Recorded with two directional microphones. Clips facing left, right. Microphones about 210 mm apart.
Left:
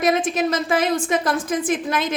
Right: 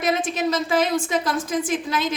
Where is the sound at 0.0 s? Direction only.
55° left (ahead or behind).